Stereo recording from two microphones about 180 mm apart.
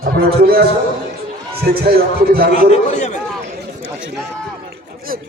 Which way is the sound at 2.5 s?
40° left (ahead or behind).